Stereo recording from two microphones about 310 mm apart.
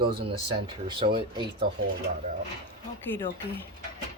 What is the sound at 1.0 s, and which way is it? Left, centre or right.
Speech, centre.